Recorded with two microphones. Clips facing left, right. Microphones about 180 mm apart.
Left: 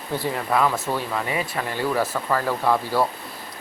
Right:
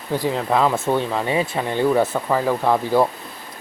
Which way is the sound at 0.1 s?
15° right (ahead or behind).